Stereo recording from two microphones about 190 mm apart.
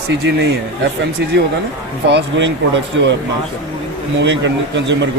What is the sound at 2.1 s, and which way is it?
Speech, 70° right (ahead or behind).